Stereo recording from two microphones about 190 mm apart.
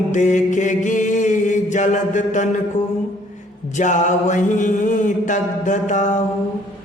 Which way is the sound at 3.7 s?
40° left (ahead or behind).